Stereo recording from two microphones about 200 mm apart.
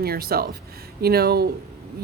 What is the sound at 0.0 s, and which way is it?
Speech, 50° right (ahead or behind).